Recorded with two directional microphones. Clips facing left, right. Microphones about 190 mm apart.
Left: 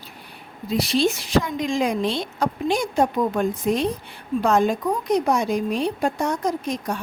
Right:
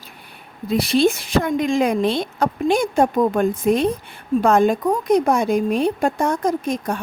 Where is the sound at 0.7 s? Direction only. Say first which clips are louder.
Right 4 dB; 55° right (ahead or behind).